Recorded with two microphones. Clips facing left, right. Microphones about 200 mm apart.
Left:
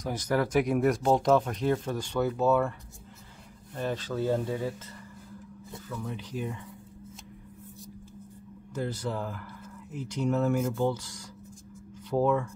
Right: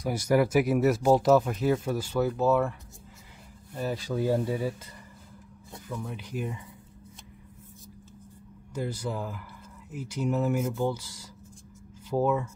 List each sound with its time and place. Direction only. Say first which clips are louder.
0.0 s speech: right 4 dB; 10° right (ahead or behind)
3.7 s speech: right 1 dB; 10° right (ahead or behind)
6.0 s speech: left 1 dB; 5° right (ahead or behind)
8.7 s speech: even; 10° right (ahead or behind)